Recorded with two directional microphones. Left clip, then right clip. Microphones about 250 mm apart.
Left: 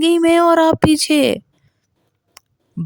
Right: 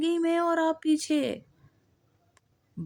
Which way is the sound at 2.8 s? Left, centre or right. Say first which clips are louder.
Left 12 dB; left.